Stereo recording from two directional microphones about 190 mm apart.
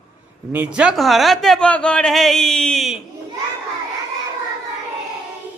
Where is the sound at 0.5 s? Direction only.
10° right (ahead or behind).